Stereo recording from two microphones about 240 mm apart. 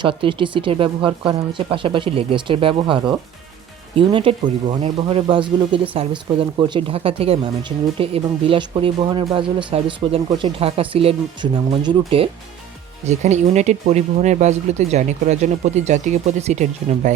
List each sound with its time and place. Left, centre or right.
0.0 s speech: right